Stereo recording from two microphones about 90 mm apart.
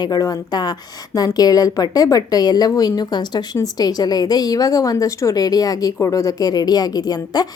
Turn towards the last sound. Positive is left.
turn(degrees=45)  # may be behind; listen again after turning